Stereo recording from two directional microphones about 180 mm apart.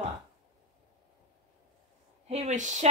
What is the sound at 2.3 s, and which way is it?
Speech, 40° right (ahead or behind).